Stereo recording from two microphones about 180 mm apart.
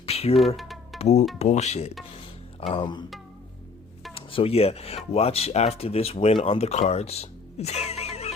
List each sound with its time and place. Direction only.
0.0 s music: 35° left (ahead or behind)
0.3 s music: centre (ahead or behind)
0.9 s speech: 40° left (ahead or behind)
4.1 s speech: 30° left (ahead or behind)